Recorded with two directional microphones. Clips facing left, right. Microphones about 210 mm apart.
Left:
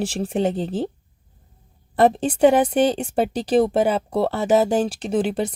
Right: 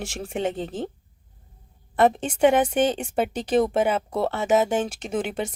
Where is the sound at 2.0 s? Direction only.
35° left (ahead or behind).